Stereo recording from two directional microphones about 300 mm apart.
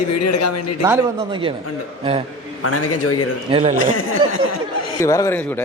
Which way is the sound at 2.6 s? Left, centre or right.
Left.